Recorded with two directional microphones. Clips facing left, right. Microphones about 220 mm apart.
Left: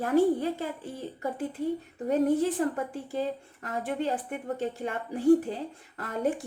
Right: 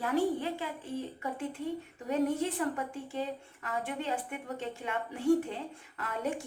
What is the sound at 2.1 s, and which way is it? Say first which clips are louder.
A woman's voice: left 5 dB; 40° left (ahead or behind).